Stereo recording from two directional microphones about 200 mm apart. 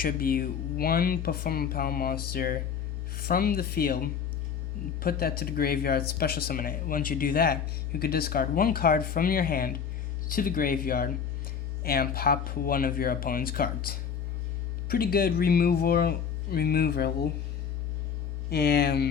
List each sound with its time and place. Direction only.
0.0 s speech: 45° left (ahead or behind)
18.5 s speech: 50° left (ahead or behind)